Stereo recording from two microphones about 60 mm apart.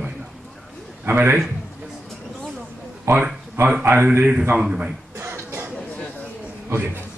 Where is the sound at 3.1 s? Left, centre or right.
Right.